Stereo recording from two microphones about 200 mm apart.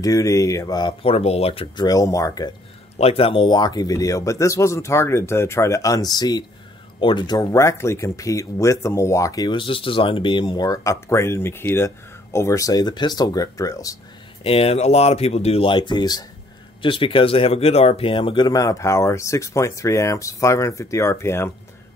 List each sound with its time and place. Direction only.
0.0 s speech: 15° left (ahead or behind)
3.0 s speech: 30° left (ahead or behind)
14.4 s speech: 30° left (ahead or behind); by 21.5 s 15° left (ahead or behind)